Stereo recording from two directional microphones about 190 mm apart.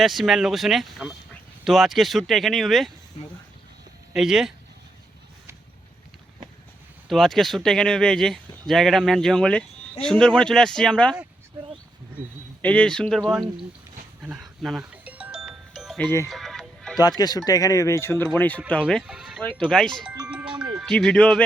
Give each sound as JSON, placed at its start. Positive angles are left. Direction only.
{"t": 0.0, "sound": "speech", "side_deg": 0}
{"t": 4.1, "sound": "speech", "side_deg": -5}
{"t": 7.1, "sound": "speech", "side_deg": 0}
{"t": 12.6, "sound": "speech", "side_deg": 5}
{"t": 14.2, "sound": "music", "side_deg": -5}
{"t": 17.0, "sound": "speech", "side_deg": 20}
{"t": 20.2, "sound": "music", "side_deg": -5}
{"t": 20.7, "sound": "speech", "side_deg": 0}